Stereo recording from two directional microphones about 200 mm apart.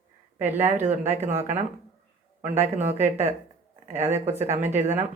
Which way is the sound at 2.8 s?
10° right (ahead or behind).